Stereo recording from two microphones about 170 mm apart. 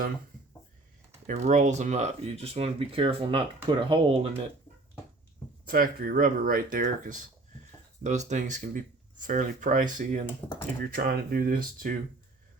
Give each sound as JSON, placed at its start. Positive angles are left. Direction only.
{"t": 1.3, "sound": "speech", "side_deg": -45}
{"t": 5.6, "sound": "speech", "side_deg": -60}
{"t": 10.9, "sound": "speech", "side_deg": -65}